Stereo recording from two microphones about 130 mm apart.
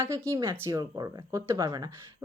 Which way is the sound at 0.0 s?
25° right (ahead or behind).